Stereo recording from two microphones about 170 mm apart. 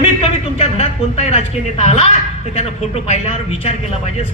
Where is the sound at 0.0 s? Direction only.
40° left (ahead or behind).